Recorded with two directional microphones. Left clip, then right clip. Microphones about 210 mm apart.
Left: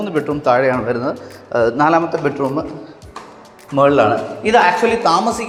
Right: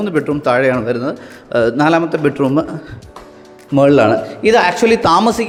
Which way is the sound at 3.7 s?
60° right (ahead or behind).